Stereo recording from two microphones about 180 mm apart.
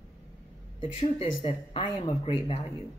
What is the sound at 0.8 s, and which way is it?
A woman's voice, 30° left (ahead or behind).